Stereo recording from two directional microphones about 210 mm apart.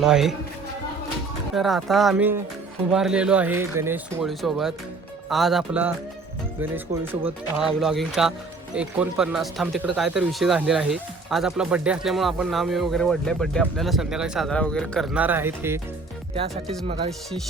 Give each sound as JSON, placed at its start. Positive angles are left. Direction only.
{"t": 0.0, "sound": "speech", "side_deg": 0}
{"t": 1.5, "sound": "speech", "side_deg": 0}
{"t": 16.3, "sound": "speech", "side_deg": -30}